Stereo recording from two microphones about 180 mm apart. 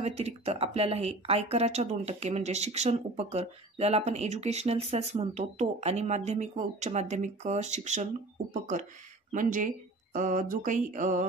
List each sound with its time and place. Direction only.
0.0 s speech: 35° right (ahead or behind)
9.3 s speech: 45° right (ahead or behind)